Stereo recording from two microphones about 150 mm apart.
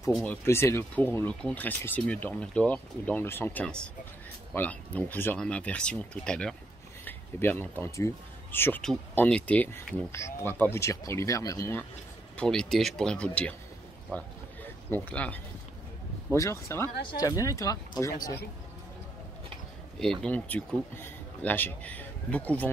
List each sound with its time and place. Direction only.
0.1 s speech: 5° left (ahead or behind)
0.5 s speech: 15° left (ahead or behind)
12.4 s speech: 5° left (ahead or behind); by 17.7 s 20° left (ahead or behind)
20.2 s speech: 10° left (ahead or behind)